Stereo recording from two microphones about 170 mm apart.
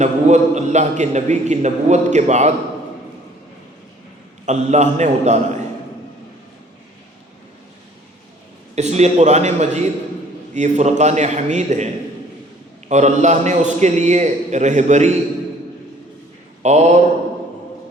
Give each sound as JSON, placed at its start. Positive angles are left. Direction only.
{"t": 0.0, "sound": "a man's voice", "side_deg": -45}
{"t": 4.4, "sound": "a man's voice", "side_deg": -45}
{"t": 8.7, "sound": "a man's voice", "side_deg": -40}
{"t": 12.9, "sound": "a man's voice", "side_deg": -45}
{"t": 16.6, "sound": "a man's voice", "side_deg": -40}